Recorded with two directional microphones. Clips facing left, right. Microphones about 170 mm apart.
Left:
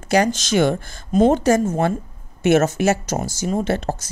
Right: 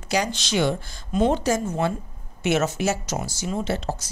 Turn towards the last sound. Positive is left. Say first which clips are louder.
# left 5 dB
turn(degrees=50)  # may be behind; listen again after turning